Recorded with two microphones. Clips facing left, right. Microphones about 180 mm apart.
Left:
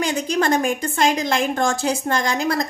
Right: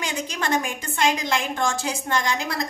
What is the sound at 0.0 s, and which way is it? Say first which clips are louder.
A woman's voice: left 8 dB; 40° left (ahead or behind).